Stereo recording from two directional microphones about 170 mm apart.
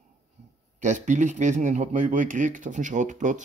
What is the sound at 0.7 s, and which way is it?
Speech, 45° right (ahead or behind).